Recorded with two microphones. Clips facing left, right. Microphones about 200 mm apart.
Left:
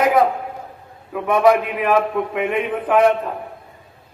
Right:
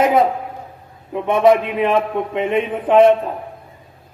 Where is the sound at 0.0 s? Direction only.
25° right (ahead or behind).